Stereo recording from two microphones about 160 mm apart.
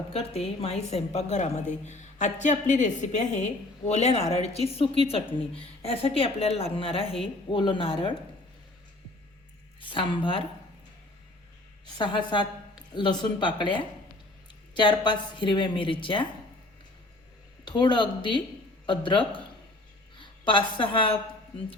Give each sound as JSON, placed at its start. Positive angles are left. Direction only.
{"t": 0.1, "sound": "a woman's voice", "side_deg": 40}
{"t": 9.8, "sound": "a woman's voice", "side_deg": 30}
{"t": 11.9, "sound": "a woman's voice", "side_deg": 30}
{"t": 17.7, "sound": "a woman's voice", "side_deg": 30}